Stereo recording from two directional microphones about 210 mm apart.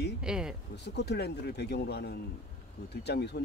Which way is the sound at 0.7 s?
50° left (ahead or behind).